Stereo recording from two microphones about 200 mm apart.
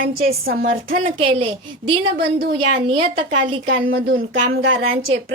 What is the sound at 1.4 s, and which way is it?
Speech, 25° right (ahead or behind).